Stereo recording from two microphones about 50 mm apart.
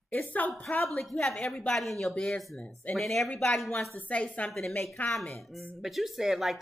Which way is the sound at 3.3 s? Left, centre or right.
Centre.